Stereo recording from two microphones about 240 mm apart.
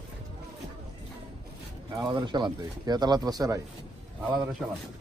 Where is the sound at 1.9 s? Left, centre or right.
Centre.